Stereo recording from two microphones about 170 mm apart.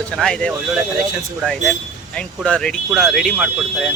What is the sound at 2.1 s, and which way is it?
Speech, 5° left (ahead or behind).